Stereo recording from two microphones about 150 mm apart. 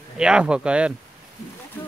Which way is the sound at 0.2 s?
5° right (ahead or behind).